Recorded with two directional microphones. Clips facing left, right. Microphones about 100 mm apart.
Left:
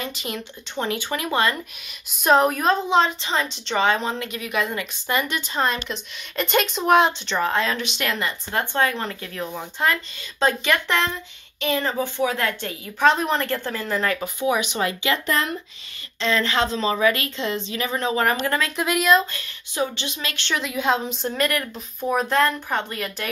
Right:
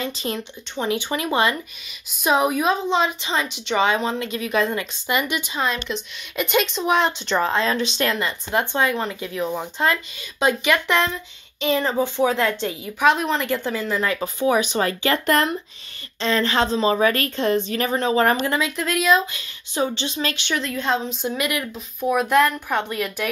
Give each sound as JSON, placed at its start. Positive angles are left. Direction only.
{"t": 0.0, "sound": "speech", "side_deg": -30}
{"t": 2.1, "sound": "speech", "side_deg": -5}
{"t": 5.0, "sound": "speech", "side_deg": -15}
{"t": 5.5, "sound": "speech", "side_deg": 0}
{"t": 7.3, "sound": "speech", "side_deg": -25}
{"t": 13.0, "sound": "speech", "side_deg": -5}
{"t": 14.4, "sound": "speech", "side_deg": -35}
{"t": 15.3, "sound": "speech", "side_deg": -65}
{"t": 16.2, "sound": "a woman's voice", "side_deg": -35}
{"t": 17.9, "sound": "speech", "side_deg": -30}
{"t": 18.8, "sound": "speech", "side_deg": 5}
{"t": 19.3, "sound": "speech", "side_deg": -25}
{"t": 20.5, "sound": "speech", "side_deg": 5}
{"t": 21.4, "sound": "speech", "side_deg": -10}